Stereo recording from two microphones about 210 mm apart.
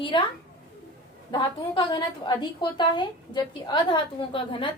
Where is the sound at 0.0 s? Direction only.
25° left (ahead or behind).